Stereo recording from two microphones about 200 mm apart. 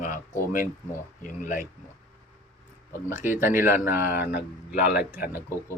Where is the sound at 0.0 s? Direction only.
40° left (ahead or behind).